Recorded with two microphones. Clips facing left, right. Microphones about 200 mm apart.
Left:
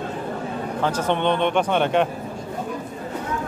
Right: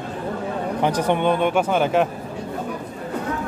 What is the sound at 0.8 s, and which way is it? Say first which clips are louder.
Speech: right 2 dB; 15° right (ahead or behind).